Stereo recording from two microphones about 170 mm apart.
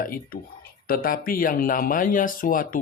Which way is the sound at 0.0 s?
55° left (ahead or behind).